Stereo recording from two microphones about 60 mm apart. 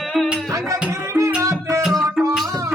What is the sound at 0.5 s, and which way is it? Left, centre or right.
Music, right.